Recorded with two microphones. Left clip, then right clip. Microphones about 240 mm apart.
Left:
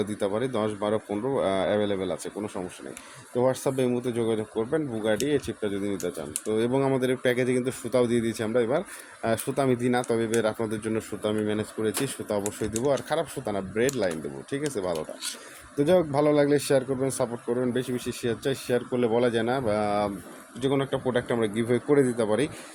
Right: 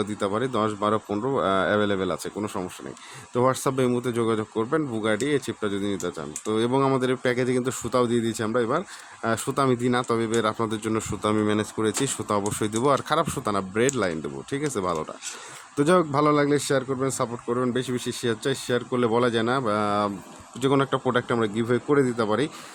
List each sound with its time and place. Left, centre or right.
0.0 s speech: centre